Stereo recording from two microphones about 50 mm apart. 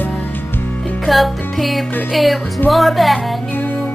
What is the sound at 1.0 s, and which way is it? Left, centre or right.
Music, centre.